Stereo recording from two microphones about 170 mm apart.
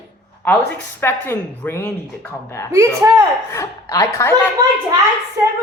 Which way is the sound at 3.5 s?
20° left (ahead or behind).